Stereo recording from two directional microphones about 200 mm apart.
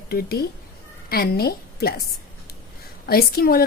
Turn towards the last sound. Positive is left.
turn(degrees=50)  # may be behind; listen again after turning